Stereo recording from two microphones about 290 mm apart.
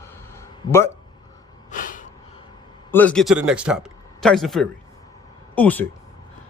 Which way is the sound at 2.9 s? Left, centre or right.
Centre.